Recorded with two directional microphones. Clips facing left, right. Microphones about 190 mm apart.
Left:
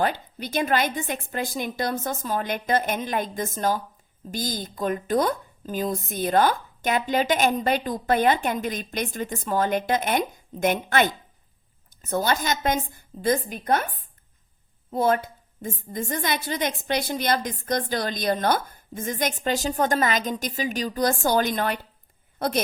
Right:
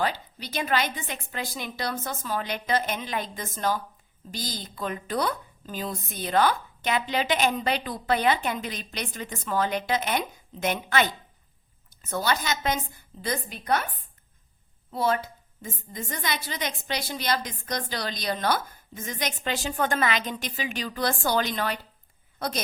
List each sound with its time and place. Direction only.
0.0 s a woman's voice: 50° left (ahead or behind)